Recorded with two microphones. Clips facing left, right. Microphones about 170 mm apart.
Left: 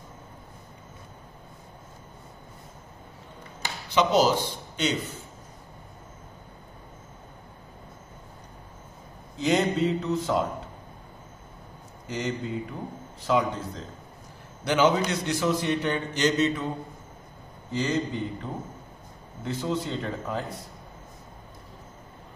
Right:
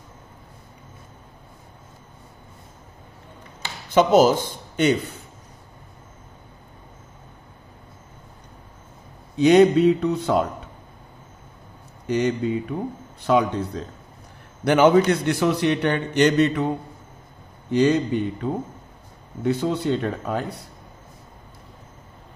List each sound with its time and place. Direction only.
3.9 s a man's voice: 50° right (ahead or behind)
9.4 s mantra: 65° right (ahead or behind)
12.1 s a man's voice: 65° right (ahead or behind)
14.6 s mantra: 55° right (ahead or behind)
17.6 s a man's voice: 65° right (ahead or behind)